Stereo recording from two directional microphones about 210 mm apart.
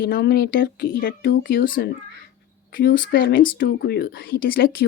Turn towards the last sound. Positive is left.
turn(degrees=45)  # may be behind; listen again after turning